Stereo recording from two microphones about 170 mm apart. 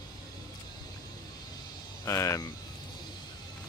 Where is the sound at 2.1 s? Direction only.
20° left (ahead or behind).